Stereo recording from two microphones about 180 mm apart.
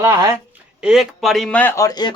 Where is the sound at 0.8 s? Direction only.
5° right (ahead or behind); by 2.1 s 20° left (ahead or behind).